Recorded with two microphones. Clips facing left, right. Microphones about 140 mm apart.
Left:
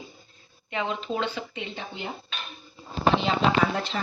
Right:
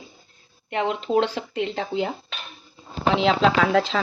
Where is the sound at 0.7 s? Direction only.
65° right (ahead or behind); by 2.0 s 90° right.